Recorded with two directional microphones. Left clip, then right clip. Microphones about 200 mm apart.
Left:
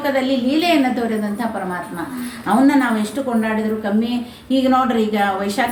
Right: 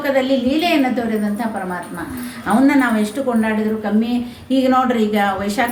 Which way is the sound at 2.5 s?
15° right (ahead or behind).